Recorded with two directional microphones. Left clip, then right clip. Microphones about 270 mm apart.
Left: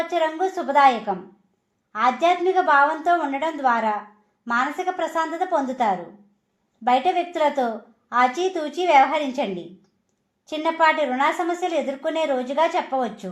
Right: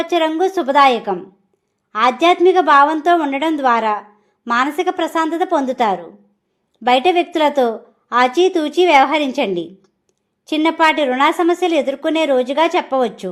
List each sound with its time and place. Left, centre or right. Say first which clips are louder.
0.1 s speech: right 6 dB; right